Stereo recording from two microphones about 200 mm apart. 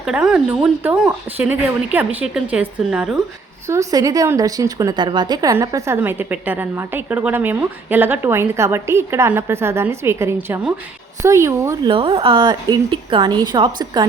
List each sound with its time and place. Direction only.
0.0 s speech: 5° right (ahead or behind)
3.7 s a woman's voice: 15° right (ahead or behind)
11.9 s a woman's voice: 25° right (ahead or behind)